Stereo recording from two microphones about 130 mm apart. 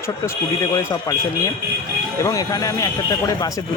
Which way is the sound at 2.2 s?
25° left (ahead or behind).